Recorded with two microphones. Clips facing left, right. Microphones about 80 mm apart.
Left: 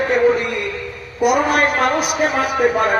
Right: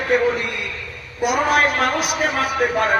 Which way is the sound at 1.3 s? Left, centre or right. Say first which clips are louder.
Left 1 dB; centre.